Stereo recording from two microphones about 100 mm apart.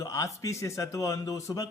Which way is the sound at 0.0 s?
30° left (ahead or behind).